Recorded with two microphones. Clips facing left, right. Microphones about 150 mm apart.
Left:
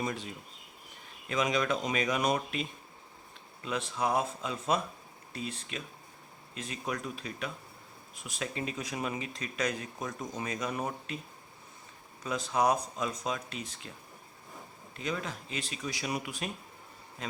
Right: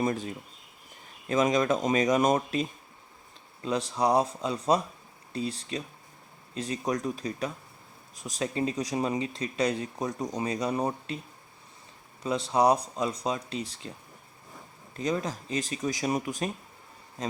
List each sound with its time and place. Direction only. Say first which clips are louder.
0.0 s speech: right 7 dB; 45° right (ahead or behind)
1.3 s speech: right 6 dB; 40° right (ahead or behind)
12.2 s speech: right 5 dB; 30° right (ahead or behind)
14.9 s speech: right 6 dB; 40° right (ahead or behind)